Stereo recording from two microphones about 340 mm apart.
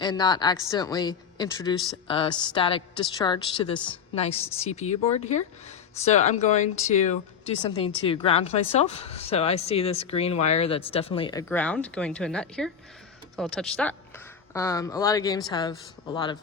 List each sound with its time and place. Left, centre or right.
0.0 s a woman's voice: centre